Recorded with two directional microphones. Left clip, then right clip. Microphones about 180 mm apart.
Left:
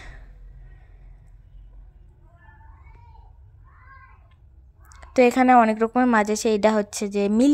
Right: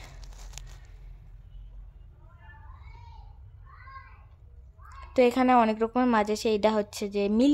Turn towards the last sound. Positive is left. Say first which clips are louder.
# left 4 dB
turn(degrees=20)  # may be behind; listen again after turning